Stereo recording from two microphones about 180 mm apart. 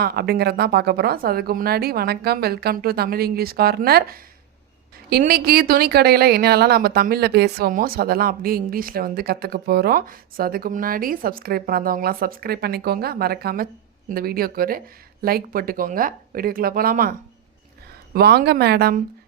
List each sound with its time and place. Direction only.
0.0 s a woman's voice: 60° right (ahead or behind)
5.3 s a woman's voice: 60° right (ahead or behind)